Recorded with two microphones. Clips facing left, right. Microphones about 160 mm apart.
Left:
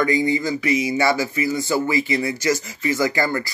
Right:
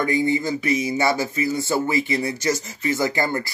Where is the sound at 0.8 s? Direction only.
25° right (ahead or behind).